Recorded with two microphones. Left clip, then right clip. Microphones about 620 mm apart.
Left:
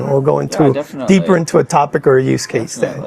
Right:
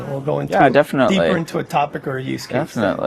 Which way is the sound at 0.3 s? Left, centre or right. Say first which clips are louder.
Left 4 dB; left.